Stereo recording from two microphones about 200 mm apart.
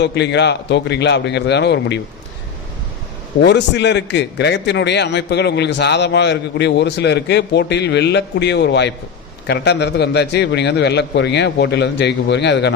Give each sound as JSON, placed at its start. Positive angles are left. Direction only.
{"t": 0.0, "sound": "a man's voice", "side_deg": 60}
{"t": 3.4, "sound": "a man's voice", "side_deg": 60}